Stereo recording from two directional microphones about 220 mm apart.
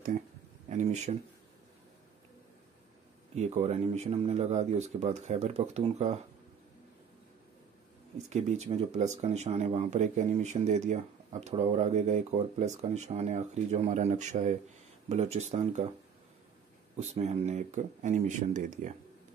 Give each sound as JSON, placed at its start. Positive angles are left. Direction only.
{"t": 0.7, "sound": "speech", "side_deg": -35}
{"t": 3.3, "sound": "speech", "side_deg": -30}
{"t": 8.3, "sound": "speech", "side_deg": -30}
{"t": 17.0, "sound": "speech", "side_deg": -30}